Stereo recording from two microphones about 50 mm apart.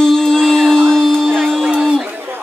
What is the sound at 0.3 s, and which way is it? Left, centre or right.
Music, centre.